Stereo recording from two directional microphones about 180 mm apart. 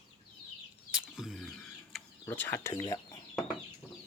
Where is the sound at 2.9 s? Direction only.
20° left (ahead or behind).